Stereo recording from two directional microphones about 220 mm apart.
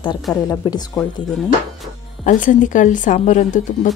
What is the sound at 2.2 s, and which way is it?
Speech, 35° left (ahead or behind).